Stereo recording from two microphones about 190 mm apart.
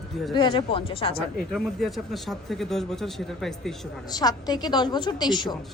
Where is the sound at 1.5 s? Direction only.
Centre (ahead or behind).